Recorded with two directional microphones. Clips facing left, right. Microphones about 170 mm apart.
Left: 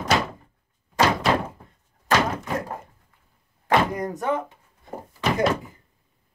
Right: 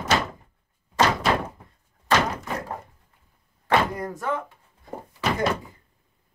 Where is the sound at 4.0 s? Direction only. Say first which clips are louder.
Left 3 dB; 20° left (ahead or behind).